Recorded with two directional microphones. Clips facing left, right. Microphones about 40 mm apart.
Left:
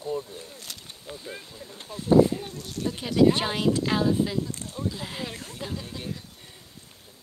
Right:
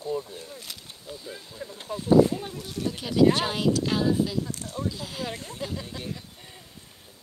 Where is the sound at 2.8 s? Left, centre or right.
Centre.